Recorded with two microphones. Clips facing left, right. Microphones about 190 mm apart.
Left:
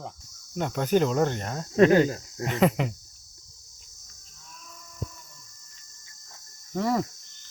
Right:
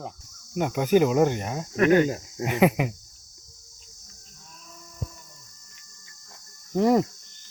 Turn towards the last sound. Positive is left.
turn(degrees=-20)  # may be behind; listen again after turning